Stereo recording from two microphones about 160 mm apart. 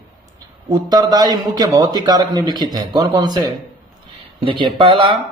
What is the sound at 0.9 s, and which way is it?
A man's voice, 25° right (ahead or behind).